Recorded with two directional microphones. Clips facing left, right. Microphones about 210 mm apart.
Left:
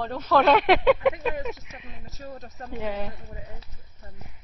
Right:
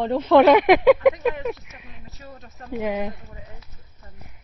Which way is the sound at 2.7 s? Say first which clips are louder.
Right 6 dB; 15° right (ahead or behind).